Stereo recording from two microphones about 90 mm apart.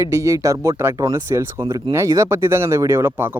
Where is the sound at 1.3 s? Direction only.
30° right (ahead or behind).